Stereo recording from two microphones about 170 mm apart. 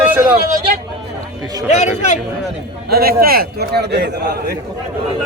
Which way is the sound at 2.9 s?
65° right (ahead or behind).